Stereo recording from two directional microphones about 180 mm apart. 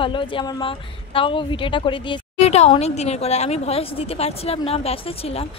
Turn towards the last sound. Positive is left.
turn(degrees=35)  # may be behind; listen again after turning